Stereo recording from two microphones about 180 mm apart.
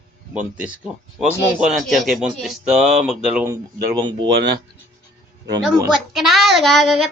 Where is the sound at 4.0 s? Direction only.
25° right (ahead or behind).